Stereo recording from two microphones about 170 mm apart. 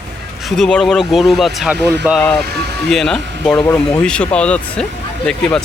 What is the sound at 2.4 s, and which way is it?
Vehicle, 70° right (ahead or behind).